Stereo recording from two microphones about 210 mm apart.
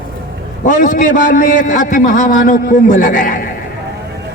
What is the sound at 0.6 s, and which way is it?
A man's voice, 40° left (ahead or behind).